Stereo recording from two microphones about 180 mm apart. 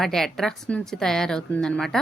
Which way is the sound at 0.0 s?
Centre (ahead or behind).